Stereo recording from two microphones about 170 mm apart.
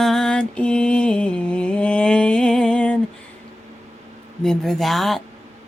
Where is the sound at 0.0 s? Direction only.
5° left (ahead or behind).